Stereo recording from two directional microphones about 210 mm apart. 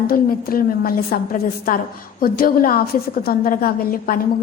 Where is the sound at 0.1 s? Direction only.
45° left (ahead or behind).